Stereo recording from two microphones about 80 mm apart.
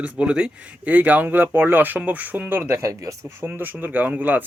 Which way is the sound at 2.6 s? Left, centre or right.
Right.